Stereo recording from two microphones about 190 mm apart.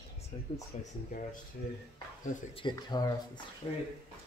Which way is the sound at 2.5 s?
25° left (ahead or behind).